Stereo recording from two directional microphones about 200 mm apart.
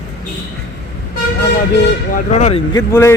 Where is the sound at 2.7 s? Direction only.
15° left (ahead or behind).